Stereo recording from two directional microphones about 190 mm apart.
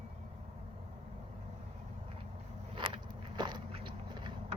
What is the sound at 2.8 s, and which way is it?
Biting, 25° right (ahead or behind).